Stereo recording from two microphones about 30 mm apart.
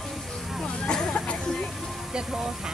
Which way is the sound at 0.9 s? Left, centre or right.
Left.